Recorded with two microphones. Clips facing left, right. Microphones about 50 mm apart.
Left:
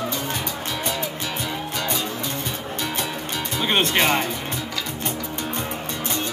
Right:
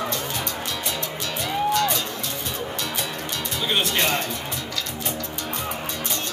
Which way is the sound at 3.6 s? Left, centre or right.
Left.